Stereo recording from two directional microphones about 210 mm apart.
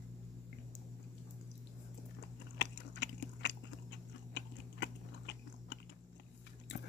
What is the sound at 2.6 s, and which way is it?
Biting, 55° left (ahead or behind).